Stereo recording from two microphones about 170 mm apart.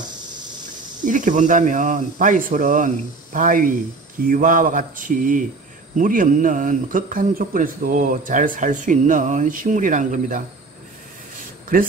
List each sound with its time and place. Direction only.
1.0 s speech: 50° right (ahead or behind)